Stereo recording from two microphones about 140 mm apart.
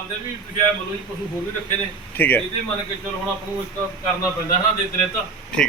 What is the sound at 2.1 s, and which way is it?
Speech, 15° left (ahead or behind).